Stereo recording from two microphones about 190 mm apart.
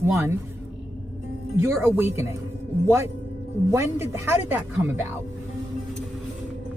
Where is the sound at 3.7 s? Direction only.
15° right (ahead or behind).